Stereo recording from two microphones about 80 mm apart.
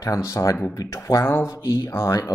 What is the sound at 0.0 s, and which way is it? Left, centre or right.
Speech, left.